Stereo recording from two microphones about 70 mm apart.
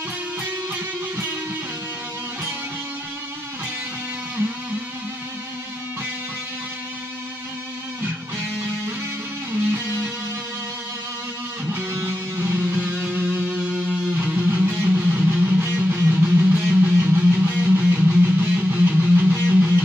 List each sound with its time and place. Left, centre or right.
9.5 s music: right
11.9 s music: right
12.4 s music: right
13.4 s music: centre